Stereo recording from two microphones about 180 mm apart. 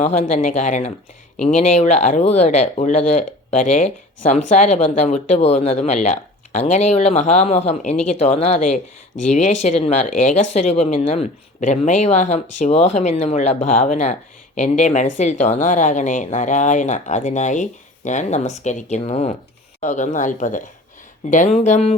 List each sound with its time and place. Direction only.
0.0 s speech: 40° left (ahead or behind)